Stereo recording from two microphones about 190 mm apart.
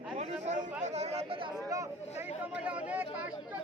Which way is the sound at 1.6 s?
15° right (ahead or behind).